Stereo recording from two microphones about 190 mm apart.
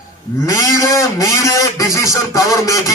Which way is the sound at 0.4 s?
15° left (ahead or behind).